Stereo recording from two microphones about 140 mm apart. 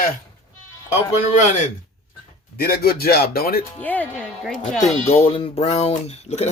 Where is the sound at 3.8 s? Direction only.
10° left (ahead or behind).